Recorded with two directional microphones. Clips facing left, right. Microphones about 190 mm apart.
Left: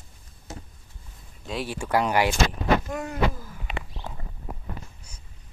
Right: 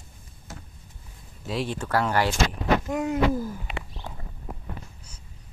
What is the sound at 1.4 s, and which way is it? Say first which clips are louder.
Speech: right 2 dB; centre (ahead or behind).